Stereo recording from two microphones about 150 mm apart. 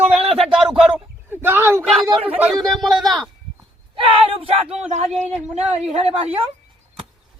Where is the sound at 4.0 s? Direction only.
35° right (ahead or behind).